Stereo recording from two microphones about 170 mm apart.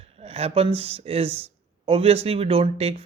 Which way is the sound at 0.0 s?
40° right (ahead or behind).